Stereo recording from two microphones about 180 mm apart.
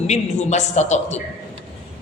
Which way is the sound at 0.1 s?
40° left (ahead or behind).